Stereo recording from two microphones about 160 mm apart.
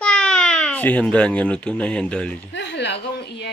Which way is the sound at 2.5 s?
90° left.